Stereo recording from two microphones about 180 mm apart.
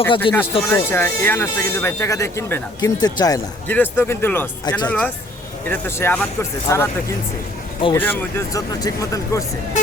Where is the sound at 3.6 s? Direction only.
10° left (ahead or behind).